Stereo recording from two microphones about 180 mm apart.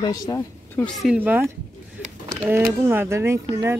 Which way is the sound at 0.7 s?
5° left (ahead or behind).